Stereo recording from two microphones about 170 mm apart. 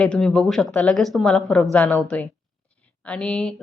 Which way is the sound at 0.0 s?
5° left (ahead or behind).